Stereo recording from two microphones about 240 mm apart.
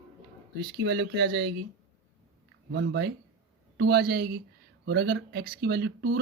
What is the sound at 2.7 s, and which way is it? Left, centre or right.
Speech, right.